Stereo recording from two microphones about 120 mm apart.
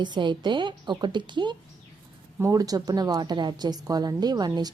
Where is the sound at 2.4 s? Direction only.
30° right (ahead or behind).